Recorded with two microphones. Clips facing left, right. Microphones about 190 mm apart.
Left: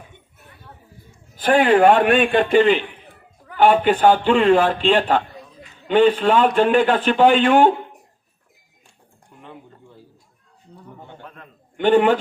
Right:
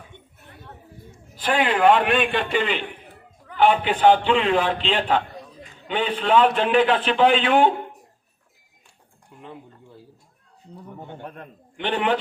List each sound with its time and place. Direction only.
1.4 s a man's voice: 50° left (ahead or behind)
9.4 s a sound: centre (ahead or behind)
11.8 s a man's voice: 45° left (ahead or behind)